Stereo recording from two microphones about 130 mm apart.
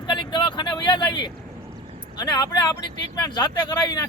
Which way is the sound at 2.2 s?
30° left (ahead or behind).